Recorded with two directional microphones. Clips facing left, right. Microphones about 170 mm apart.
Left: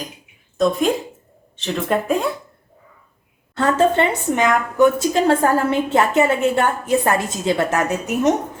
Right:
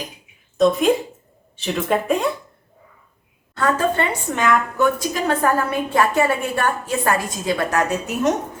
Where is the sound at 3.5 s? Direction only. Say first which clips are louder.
Left 3 dB; 25° left (ahead or behind).